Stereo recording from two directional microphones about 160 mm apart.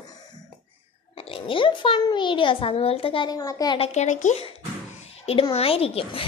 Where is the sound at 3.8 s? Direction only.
45° left (ahead or behind).